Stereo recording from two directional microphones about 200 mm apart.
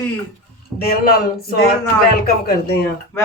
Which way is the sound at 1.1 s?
45° left (ahead or behind).